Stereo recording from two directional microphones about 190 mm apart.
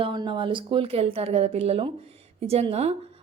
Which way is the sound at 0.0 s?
25° right (ahead or behind).